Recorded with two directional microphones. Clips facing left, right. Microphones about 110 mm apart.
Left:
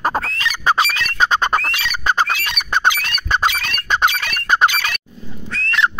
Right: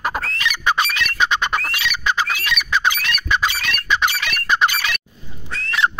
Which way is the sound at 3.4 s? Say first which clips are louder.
Left 3 dB; 50° left (ahead or behind).